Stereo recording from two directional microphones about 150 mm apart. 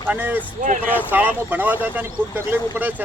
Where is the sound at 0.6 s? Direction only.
70° right (ahead or behind).